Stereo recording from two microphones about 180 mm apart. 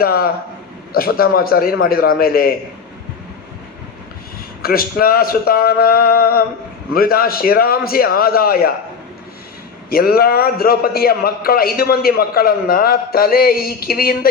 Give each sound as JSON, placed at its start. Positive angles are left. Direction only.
{"t": 0.0, "sound": "a man's voice", "side_deg": 55}
{"t": 4.6, "sound": "a man's voice", "side_deg": 55}
{"t": 9.9, "sound": "a man's voice", "side_deg": 55}